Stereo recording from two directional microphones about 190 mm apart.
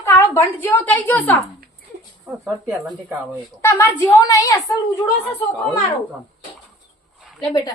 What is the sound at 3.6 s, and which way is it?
A woman's voice, 10° left (ahead or behind).